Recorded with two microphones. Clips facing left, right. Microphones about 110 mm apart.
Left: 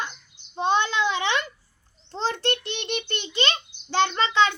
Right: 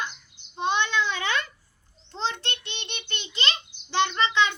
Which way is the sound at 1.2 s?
25° left (ahead or behind).